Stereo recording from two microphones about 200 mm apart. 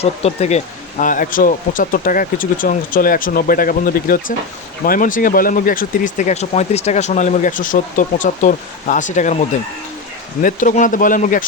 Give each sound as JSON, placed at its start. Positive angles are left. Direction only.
{"t": 0.0, "sound": "speech", "side_deg": 30}
{"t": 10.4, "sound": "speech", "side_deg": 40}